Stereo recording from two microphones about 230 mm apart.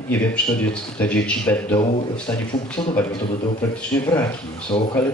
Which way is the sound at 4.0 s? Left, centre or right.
Centre.